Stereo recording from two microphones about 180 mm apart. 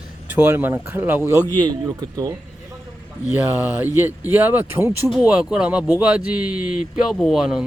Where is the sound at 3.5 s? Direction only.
10° right (ahead or behind).